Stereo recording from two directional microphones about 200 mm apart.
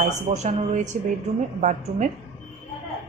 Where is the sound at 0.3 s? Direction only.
35° right (ahead or behind).